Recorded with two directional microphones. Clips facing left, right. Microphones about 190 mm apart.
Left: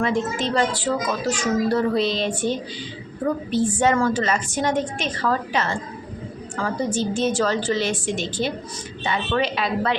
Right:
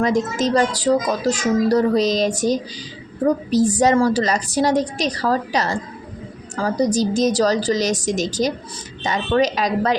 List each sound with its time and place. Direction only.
0.0 s a child's voice: 40° right (ahead or behind)